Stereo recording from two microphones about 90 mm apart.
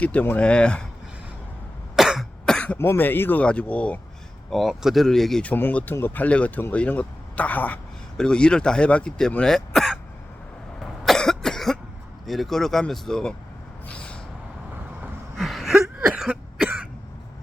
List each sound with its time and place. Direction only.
0.0 s speech: 15° left (ahead or behind)
2.0 s cough: 5° right (ahead or behind)
2.5 s cough: 10° left (ahead or behind)
2.7 s speech: 25° left (ahead or behind)
4.5 s speech: centre (ahead or behind)
5.4 s speech: 20° left (ahead or behind)
11.0 s cough: 5° left (ahead or behind)
12.2 s speech: centre (ahead or behind)
13.8 s a sound: 10° left (ahead or behind)
15.4 s a sound: centre (ahead or behind)
16.3 s cough: 15° right (ahead or behind)